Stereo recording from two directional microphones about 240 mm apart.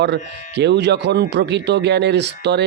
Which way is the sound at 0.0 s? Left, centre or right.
Right.